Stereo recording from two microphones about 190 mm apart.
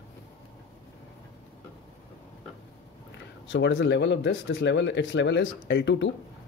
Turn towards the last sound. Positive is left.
turn(degrees=70)  # may be behind; listen again after turning